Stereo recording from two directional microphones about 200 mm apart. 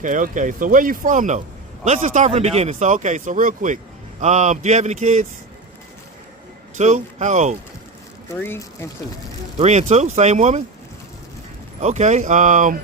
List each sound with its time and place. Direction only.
0.0 s speech: 40° right (ahead or behind)
6.7 s speech: 35° right (ahead or behind)
8.3 s speech: 15° left (ahead or behind)
9.6 s speech: 35° right (ahead or behind)
11.8 s speech: 35° right (ahead or behind)